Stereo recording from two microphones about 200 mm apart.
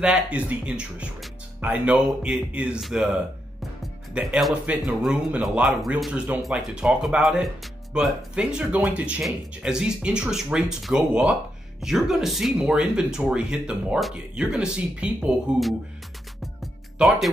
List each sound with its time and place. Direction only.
0.0 s speech: 5° right (ahead or behind)
17.0 s speech: 5° right (ahead or behind)